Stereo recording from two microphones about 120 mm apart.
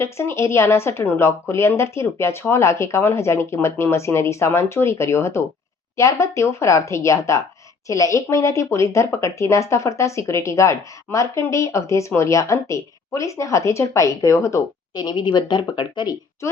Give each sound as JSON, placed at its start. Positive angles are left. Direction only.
{"t": 0.0, "sound": "speech", "side_deg": 25}